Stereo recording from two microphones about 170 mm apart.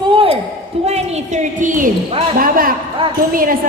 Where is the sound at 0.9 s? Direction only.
40° right (ahead or behind).